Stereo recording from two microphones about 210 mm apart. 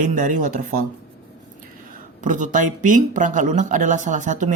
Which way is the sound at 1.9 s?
35° right (ahead or behind).